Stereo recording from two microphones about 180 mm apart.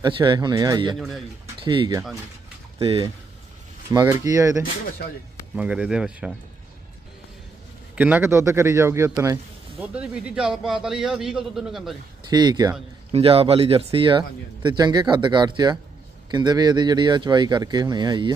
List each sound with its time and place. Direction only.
0.0 s speech: 25° right (ahead or behind)
0.9 s a man's voice: centre (ahead or behind)
1.6 s speech: 25° right (ahead or behind)
4.0 s a man's voice: 20° right (ahead or behind)
5.5 s a man's voice: 5° right (ahead or behind)
7.9 s a man's voice: 10° right (ahead or behind)
12.3 s speech: 25° right (ahead or behind)